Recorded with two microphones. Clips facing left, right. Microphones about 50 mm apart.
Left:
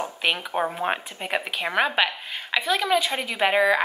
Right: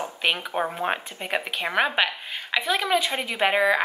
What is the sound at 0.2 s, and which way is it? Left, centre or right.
Speech, centre.